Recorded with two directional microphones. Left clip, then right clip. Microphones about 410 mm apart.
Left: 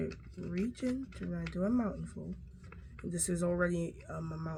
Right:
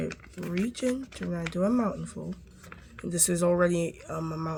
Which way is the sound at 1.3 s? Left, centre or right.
Right.